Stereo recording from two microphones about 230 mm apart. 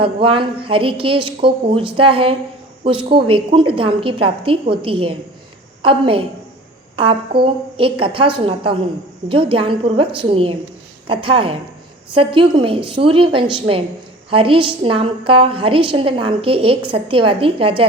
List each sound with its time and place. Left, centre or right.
0.0 s a woman's voice: right